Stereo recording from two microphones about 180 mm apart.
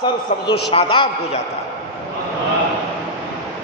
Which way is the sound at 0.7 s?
30° left (ahead or behind).